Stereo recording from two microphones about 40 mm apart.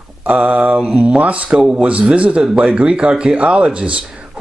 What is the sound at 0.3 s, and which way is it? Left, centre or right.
A man's voice, right.